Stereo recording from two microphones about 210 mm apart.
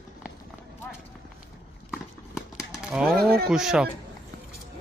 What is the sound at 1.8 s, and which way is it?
Horse, centre (ahead or behind).